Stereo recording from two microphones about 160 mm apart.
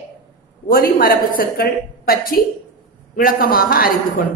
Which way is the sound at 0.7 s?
65° left (ahead or behind).